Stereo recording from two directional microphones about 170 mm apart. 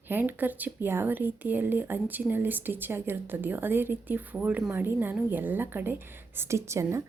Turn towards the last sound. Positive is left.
turn(degrees=-15)  # may be behind; listen again after turning